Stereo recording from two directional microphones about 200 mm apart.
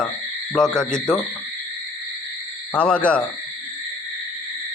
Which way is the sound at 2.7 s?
5° left (ahead or behind).